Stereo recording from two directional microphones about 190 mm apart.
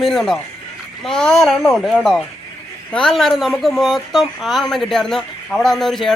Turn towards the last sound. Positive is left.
turn(degrees=0)  # may be behind; listen again after turning